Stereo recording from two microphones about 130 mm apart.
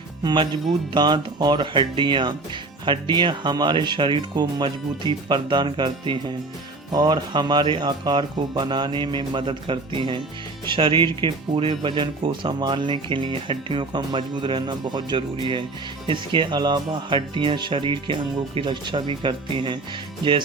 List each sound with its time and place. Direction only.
0.2 s speech: 35° right (ahead or behind)